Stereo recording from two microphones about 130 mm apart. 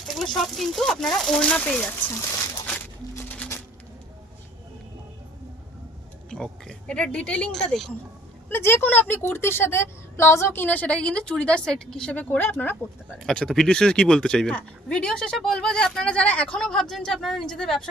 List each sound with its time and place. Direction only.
0.1 s speech: centre (ahead or behind)
3.2 s music: 10° left (ahead or behind)
6.3 s a woman's voice: 5° left (ahead or behind)
8.5 s a woman's voice: 20° left (ahead or behind)
13.1 s speech: 5° left (ahead or behind)